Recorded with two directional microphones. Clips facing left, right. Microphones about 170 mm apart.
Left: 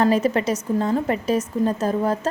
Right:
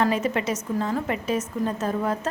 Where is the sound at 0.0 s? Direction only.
35° left (ahead or behind).